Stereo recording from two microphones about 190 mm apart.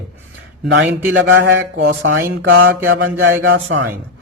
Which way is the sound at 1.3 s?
75° right (ahead or behind).